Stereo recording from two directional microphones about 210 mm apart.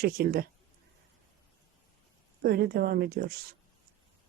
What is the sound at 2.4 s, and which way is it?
Speech, 50° right (ahead or behind).